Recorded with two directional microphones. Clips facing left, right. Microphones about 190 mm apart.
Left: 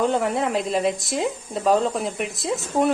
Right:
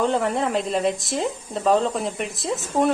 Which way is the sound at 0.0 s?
Centre (ahead or behind).